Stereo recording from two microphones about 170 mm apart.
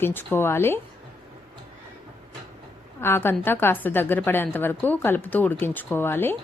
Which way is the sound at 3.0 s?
15° left (ahead or behind).